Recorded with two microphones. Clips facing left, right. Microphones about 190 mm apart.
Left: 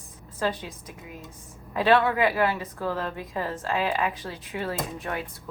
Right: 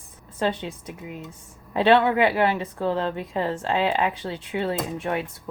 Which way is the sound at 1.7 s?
25° right (ahead or behind).